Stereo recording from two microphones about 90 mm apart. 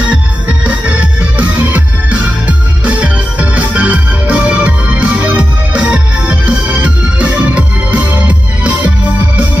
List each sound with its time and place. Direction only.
0.1 s music: 15° right (ahead or behind)